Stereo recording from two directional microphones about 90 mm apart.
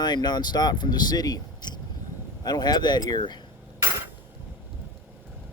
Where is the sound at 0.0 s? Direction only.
50° left (ahead or behind).